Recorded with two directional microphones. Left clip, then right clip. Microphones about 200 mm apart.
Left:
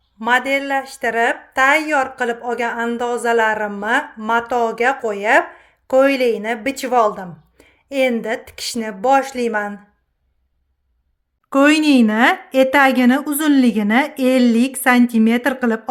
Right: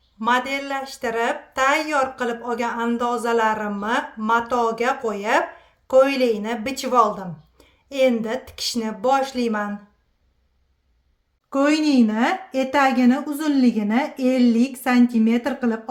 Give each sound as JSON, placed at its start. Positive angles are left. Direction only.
{"t": 0.3, "sound": "speech", "side_deg": 25}
{"t": 11.4, "sound": "speech", "side_deg": 40}